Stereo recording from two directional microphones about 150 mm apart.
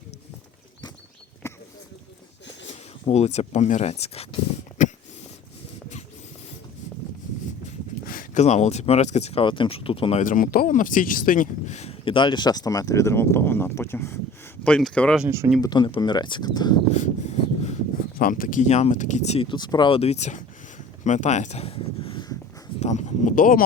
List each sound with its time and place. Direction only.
1.4 s a sound: 20° left (ahead or behind)
3.1 s speech: 45° left (ahead or behind)
4.8 s a sound: 60° left (ahead or behind)
8.0 s speech: 70° left (ahead or behind); by 10.2 s 40° left (ahead or behind)
10.2 s speech: 65° left (ahead or behind); by 14.2 s 15° left (ahead or behind)
14.6 s speech: 5° left (ahead or behind)
15.6 s speech: 30° left (ahead or behind)
16.9 s a sound: 50° left (ahead or behind)
18.2 s speech: 65° left (ahead or behind); by 19.5 s 45° left (ahead or behind)
19.5 s speech: 30° left (ahead or behind)
22.8 s speech: 50° left (ahead or behind); by 23.6 s 65° left (ahead or behind)